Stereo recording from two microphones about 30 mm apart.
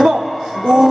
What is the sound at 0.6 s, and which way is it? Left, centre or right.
Music, centre.